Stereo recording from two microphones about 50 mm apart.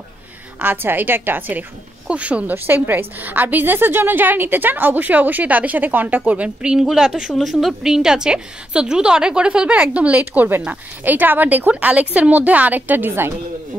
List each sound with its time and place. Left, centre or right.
0.6 s a woman's voice: right
2.0 s speech: right
2.5 s a woman's voice: right
6.8 s a woman's voice: centre; by 11.7 s right
11.7 s a woman's voice: right